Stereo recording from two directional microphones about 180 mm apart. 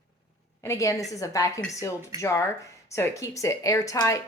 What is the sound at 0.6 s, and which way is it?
A woman's voice, 15° left (ahead or behind).